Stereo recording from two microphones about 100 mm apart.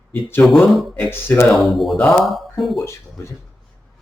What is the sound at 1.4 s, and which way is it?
Speech, centre (ahead or behind).